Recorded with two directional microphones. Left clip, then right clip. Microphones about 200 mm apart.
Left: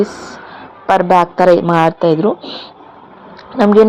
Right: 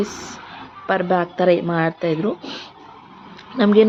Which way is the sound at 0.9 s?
5° left (ahead or behind).